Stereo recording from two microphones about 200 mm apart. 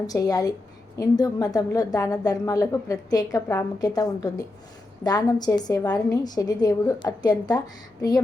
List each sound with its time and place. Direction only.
0.1 s a woman's voice: 20° left (ahead or behind)